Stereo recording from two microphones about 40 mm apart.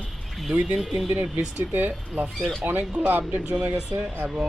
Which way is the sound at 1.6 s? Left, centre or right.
Right.